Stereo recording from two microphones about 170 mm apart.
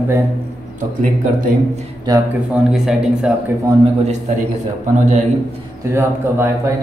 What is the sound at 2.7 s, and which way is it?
Speech, 5° right (ahead or behind).